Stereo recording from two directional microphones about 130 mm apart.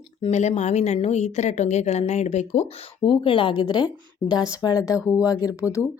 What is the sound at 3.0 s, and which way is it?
A woman's voice, 40° left (ahead or behind).